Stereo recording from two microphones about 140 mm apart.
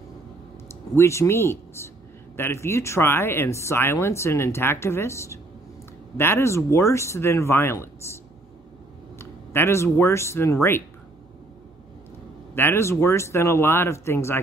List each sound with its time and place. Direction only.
0.7 s speech: 20° left (ahead or behind)
9.2 s speech: 15° left (ahead or behind)
12.5 s speech: 15° left (ahead or behind)